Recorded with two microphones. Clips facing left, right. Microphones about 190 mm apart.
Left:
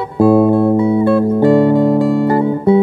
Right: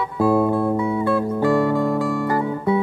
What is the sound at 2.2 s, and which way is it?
Guitar, 30° left (ahead or behind).